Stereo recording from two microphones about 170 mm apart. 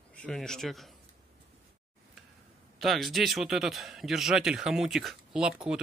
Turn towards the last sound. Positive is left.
turn(degrees=-5)  # may be behind; listen again after turning